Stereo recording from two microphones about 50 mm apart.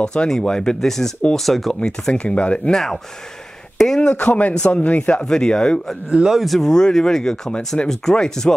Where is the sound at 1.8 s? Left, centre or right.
Left.